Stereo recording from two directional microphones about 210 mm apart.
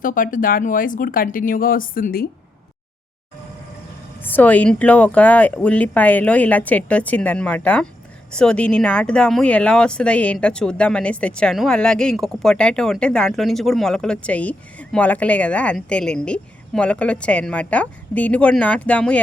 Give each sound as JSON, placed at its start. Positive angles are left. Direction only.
{"t": 0.0, "sound": "speech", "side_deg": 40}
{"t": 4.2, "sound": "speech", "side_deg": 10}